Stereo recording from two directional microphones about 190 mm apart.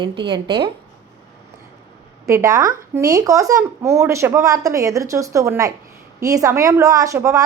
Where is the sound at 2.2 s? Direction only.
15° right (ahead or behind).